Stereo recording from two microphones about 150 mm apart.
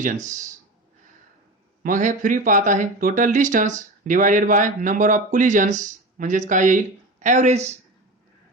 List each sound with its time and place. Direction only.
0.0 s speech: 55° right (ahead or behind)
1.8 s speech: 60° right (ahead or behind)